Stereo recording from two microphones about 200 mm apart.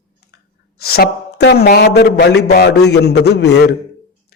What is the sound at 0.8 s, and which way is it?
Speech, 50° left (ahead or behind).